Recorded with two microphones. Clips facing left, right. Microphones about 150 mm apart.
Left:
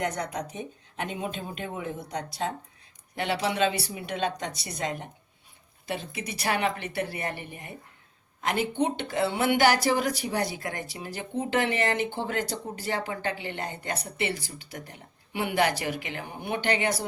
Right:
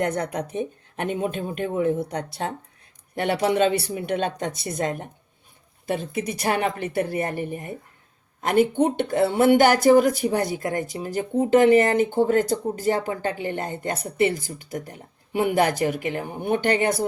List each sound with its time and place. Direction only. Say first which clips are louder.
0.0 s a woman's voice: right 5 dB; 55° right (ahead or behind)